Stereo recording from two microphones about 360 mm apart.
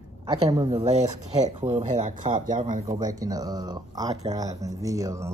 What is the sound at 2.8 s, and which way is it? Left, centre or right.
Speech, centre.